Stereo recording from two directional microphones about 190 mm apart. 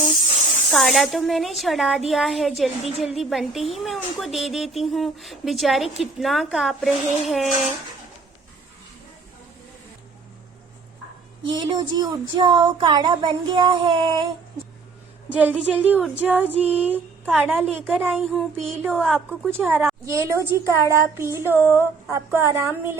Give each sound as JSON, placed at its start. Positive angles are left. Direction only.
{"t": 0.7, "sound": "a woman's voice", "side_deg": 0}
{"t": 11.4, "sound": "speech", "side_deg": -25}
{"t": 15.4, "sound": "speech", "side_deg": -5}
{"t": 19.5, "sound": "speech", "side_deg": -10}